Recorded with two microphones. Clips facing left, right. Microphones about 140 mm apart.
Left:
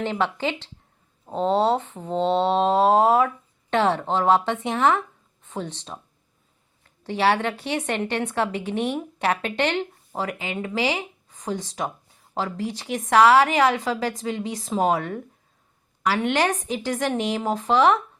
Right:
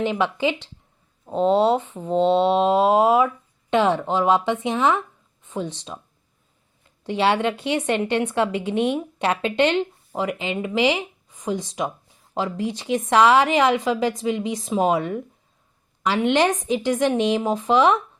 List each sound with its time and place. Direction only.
0.0 s speech: 15° right (ahead or behind)
7.0 s a woman's voice: 20° right (ahead or behind)